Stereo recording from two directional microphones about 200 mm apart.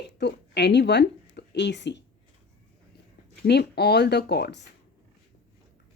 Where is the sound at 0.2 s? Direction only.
55° left (ahead or behind).